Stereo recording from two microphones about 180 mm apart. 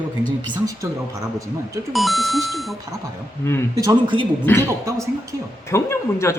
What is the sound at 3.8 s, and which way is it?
Speech, 25° right (ahead or behind).